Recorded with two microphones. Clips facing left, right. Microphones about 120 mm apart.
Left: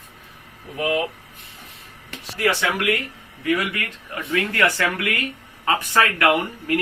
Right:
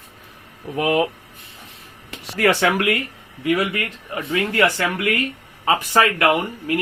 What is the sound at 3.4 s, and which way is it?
Speech, 25° right (ahead or behind).